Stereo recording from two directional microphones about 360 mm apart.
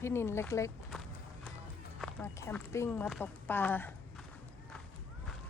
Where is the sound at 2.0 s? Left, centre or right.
Centre.